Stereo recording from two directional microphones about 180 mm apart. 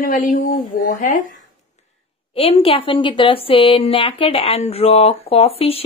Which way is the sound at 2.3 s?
30° left (ahead or behind).